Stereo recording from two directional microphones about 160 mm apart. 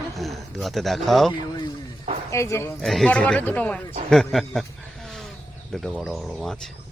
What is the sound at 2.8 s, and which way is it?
Speech, centre (ahead or behind).